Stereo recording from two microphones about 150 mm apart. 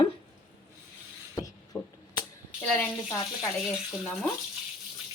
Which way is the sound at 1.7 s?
15° left (ahead or behind).